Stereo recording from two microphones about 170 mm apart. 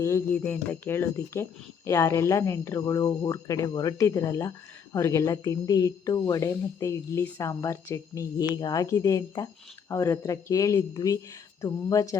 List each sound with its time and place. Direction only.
0.0 s speech: 15° left (ahead or behind)